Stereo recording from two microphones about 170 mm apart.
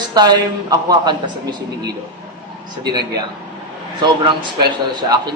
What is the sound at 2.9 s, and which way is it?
A man's voice, 25° right (ahead or behind).